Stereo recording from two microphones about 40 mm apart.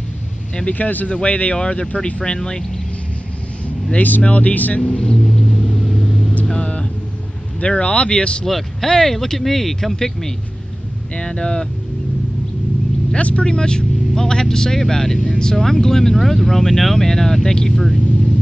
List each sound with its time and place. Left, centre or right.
0.7 s speech: left; by 2.6 s centre
4.2 s speech: left
4.9 s speech: centre
6.4 s vehicle: left
7.6 s speech: left
8.5 s speech: centre
11.1 s speech: left
13.1 s speech: left
15.5 s speech: centre